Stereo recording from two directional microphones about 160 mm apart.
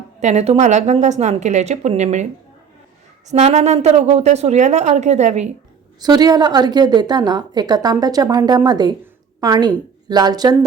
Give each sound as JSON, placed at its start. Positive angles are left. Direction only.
{"t": 0.2, "sound": "a woman's voice", "side_deg": -45}
{"t": 3.2, "sound": "a woman's voice", "side_deg": -45}
{"t": 6.0, "sound": "a woman's voice", "side_deg": -25}